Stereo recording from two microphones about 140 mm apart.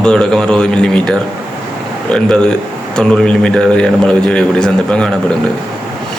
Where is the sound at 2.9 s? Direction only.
5° left (ahead or behind).